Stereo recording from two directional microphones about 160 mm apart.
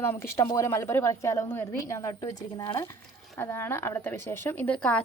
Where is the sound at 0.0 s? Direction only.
15° left (ahead or behind).